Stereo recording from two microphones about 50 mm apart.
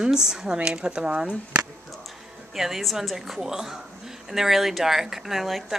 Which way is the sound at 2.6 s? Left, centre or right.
Centre.